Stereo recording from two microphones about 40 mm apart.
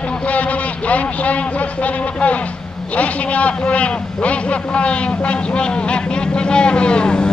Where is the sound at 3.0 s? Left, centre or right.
Left.